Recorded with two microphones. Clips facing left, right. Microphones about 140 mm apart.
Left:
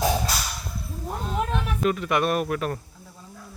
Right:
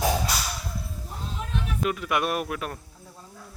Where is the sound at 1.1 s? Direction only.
65° left (ahead or behind).